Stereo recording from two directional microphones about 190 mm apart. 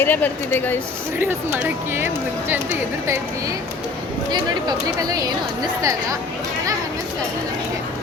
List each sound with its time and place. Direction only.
0.0 s speech: 10° left (ahead or behind)
1.2 s speech: 10° right (ahead or behind)
5.8 s speech: 15° right (ahead or behind)